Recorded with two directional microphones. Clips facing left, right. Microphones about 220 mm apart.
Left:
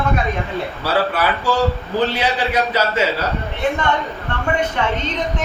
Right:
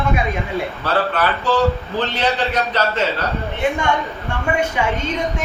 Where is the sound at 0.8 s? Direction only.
10° left (ahead or behind).